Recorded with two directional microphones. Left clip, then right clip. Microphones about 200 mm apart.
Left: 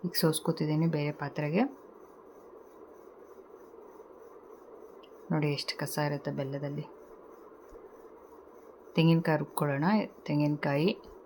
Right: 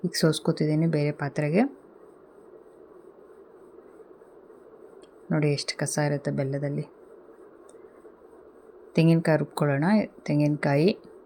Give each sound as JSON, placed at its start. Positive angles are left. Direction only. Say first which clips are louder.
{"t": 0.0, "sound": "speech", "louder": "right 5 dB", "side_deg": -15}
{"t": 5.3, "sound": "speech", "louder": "right 5 dB", "side_deg": -15}
{"t": 8.9, "sound": "speech", "louder": "right 5 dB", "side_deg": -15}